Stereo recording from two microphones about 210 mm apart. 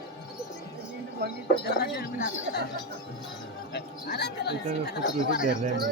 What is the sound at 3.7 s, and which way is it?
Music, 50° left (ahead or behind).